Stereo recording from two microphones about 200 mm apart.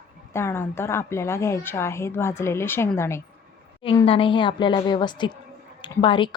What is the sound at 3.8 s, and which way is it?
Speech, 25° left (ahead or behind).